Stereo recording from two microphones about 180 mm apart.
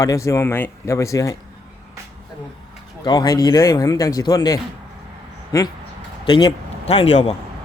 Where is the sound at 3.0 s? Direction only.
20° left (ahead or behind).